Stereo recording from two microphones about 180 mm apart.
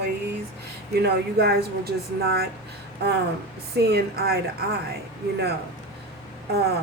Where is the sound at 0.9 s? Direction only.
65° right (ahead or behind).